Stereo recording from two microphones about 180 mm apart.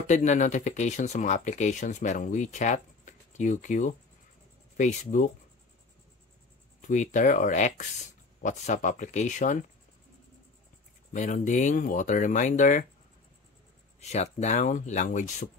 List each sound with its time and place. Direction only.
0.0 s speech: 40° left (ahead or behind)
6.8 s speech: 45° left (ahead or behind)
11.1 s speech: 45° left (ahead or behind)
13.9 s speech: 40° left (ahead or behind)